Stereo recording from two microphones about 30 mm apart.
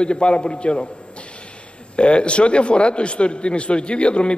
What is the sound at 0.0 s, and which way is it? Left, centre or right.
Speech, left.